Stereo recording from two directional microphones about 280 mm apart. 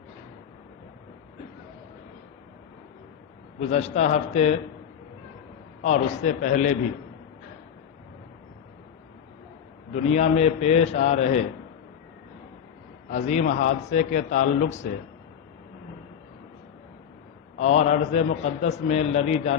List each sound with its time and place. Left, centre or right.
3.6 s a man's voice: left
5.8 s a man's voice: left
9.9 s a man's voice: left
13.1 s a man's voice: left
17.6 s a man's voice: left